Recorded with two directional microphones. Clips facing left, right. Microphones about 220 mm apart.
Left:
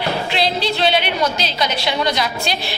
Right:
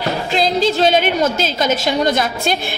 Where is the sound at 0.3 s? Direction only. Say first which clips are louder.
Right 8 dB; 45° right (ahead or behind).